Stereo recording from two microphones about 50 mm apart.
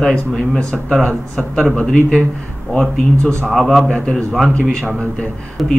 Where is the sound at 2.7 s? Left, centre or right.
Centre.